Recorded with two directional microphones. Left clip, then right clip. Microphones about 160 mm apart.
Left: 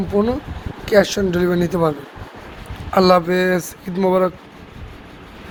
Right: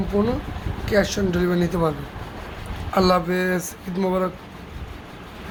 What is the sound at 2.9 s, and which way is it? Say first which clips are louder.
A woman's voice: left 6 dB; 30° left (ahead or behind).